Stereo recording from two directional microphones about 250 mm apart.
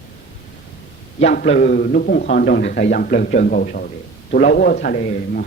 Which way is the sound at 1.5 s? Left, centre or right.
Left.